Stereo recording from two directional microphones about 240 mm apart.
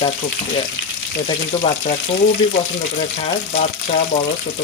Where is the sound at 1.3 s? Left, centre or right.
Left.